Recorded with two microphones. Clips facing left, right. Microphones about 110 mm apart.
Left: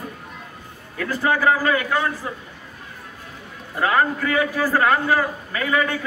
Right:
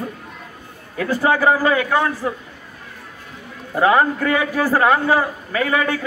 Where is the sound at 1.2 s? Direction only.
25° right (ahead or behind).